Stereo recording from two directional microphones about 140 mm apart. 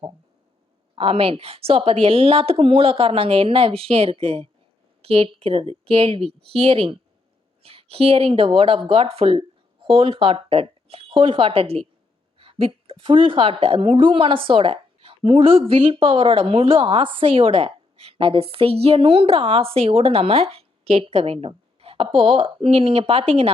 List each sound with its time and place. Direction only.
0.9 s a woman's voice: 40° right (ahead or behind)